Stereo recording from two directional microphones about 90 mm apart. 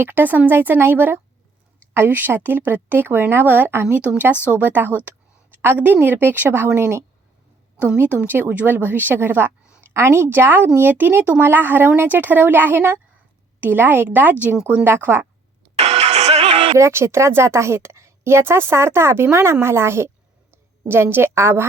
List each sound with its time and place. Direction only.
0.0 s a woman's voice: 20° right (ahead or behind)
14.5 s speech: 5° right (ahead or behind)
14.8 s a woman's voice: 25° right (ahead or behind)
16.7 s a woman's voice: 30° right (ahead or behind)